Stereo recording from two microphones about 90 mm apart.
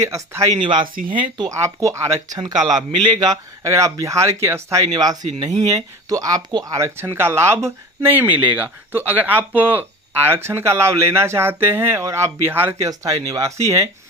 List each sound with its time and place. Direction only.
0.0 s speech: 35° right (ahead or behind)
0.6 s speech: 60° right (ahead or behind)
1.5 s speech: 35° right (ahead or behind)
2.4 s speech: 50° right (ahead or behind); by 12.7 s 25° right (ahead or behind)
12.8 s speech: 40° right (ahead or behind)